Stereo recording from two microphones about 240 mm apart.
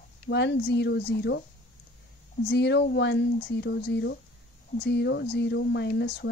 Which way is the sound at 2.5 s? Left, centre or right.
Left.